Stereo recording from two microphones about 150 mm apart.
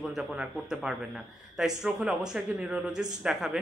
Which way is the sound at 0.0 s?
5° right (ahead or behind).